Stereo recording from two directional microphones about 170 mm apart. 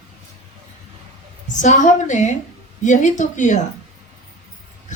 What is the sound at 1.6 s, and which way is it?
A man's voice, 45° left (ahead or behind).